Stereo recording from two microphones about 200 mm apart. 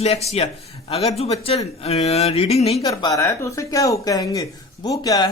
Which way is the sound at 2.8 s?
15° left (ahead or behind).